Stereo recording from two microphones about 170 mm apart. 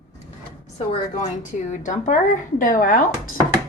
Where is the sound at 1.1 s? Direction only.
45° left (ahead or behind).